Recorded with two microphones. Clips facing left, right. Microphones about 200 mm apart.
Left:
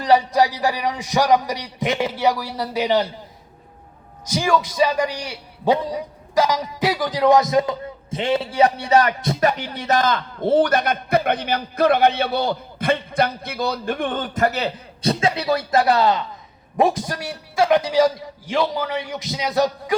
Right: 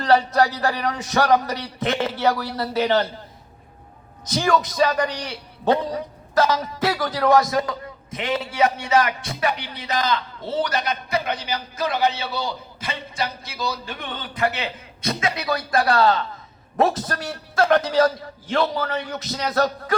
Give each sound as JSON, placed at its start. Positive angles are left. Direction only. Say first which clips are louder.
{"t": 0.0, "sound": "a man's voice", "louder": "left 1 dB", "side_deg": 15}
{"t": 4.3, "sound": "a man's voice", "louder": "left 1 dB", "side_deg": 10}